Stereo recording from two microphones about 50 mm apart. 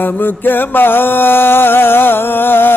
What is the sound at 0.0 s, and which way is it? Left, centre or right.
Music, left.